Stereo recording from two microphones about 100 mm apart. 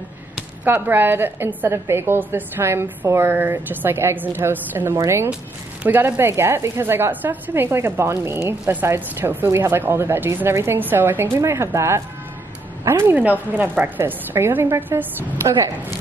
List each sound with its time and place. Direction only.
0.7 s a woman's voice: 20° right (ahead or behind)